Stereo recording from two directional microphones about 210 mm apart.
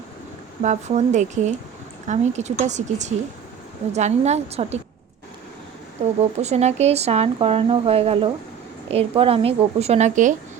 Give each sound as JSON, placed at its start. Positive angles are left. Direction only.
{"t": 0.6, "sound": "speech", "side_deg": -35}
{"t": 6.1, "sound": "speech", "side_deg": -30}